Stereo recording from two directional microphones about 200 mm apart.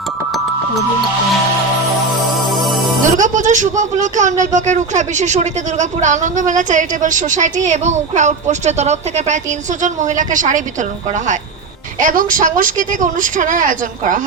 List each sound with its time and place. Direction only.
2.5 s music: centre (ahead or behind)
3.2 s speech: 40° right (ahead or behind)